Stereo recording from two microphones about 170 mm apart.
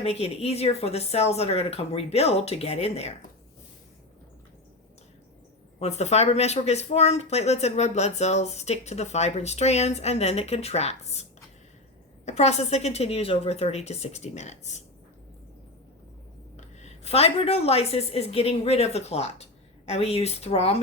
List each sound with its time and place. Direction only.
0.0 s speech: 35° left (ahead or behind)
5.8 s speech: 40° left (ahead or behind)
16.6 s a woman's voice: 40° left (ahead or behind)